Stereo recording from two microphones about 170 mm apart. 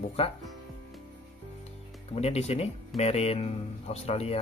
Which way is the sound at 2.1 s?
40° left (ahead or behind).